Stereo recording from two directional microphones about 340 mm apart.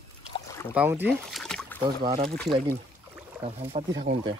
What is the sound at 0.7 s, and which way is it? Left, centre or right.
Speech, centre.